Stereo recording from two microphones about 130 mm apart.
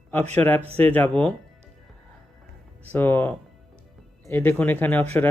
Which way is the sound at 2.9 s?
15° left (ahead or behind).